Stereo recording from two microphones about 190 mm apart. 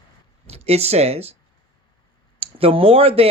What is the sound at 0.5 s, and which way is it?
Speech, 30° right (ahead or behind).